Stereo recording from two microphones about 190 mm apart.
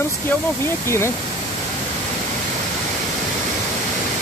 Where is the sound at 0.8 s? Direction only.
15° left (ahead or behind).